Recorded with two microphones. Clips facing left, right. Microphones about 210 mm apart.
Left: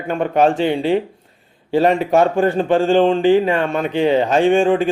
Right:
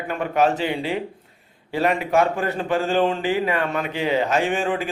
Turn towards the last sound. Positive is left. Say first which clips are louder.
# left 9 dB
turn(degrees=30)  # may be behind; listen again after turning